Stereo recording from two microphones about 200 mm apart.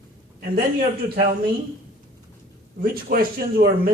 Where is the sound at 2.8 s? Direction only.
50° right (ahead or behind).